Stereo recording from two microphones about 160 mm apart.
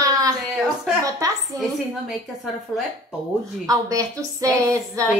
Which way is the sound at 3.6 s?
20° right (ahead or behind).